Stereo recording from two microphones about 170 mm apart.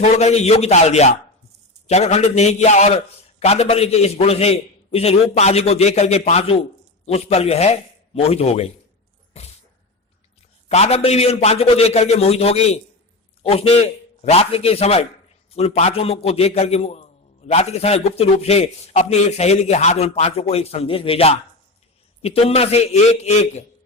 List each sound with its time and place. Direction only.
0.0 s a man's voice: 40° left (ahead or behind)
9.3 s a sound: 35° left (ahead or behind)
10.7 s a man's voice: 40° left (ahead or behind)